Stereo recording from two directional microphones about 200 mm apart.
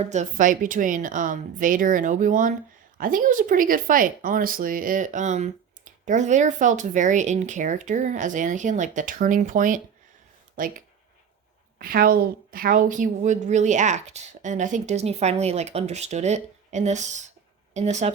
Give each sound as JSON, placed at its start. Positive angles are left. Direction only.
{"t": 0.0, "sound": "speech", "side_deg": -35}